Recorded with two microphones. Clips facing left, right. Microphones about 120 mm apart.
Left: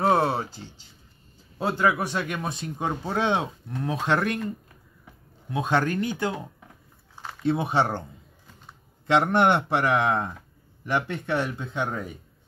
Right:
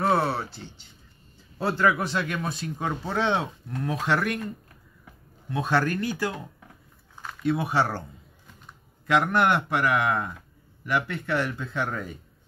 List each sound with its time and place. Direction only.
0.1 s a sound: 15° left (ahead or behind)
1.6 s speech: 15° left (ahead or behind)
5.5 s speech: 20° left (ahead or behind)
9.0 s speech: 25° left (ahead or behind)